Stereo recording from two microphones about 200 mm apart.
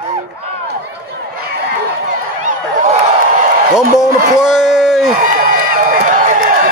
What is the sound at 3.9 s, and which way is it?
Speech, 5° right (ahead or behind).